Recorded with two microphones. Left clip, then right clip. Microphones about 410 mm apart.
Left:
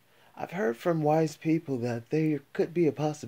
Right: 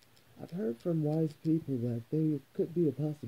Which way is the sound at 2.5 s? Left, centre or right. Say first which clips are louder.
Left 6 dB; left.